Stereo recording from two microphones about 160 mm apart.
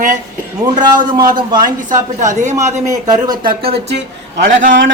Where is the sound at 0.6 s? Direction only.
25° right (ahead or behind).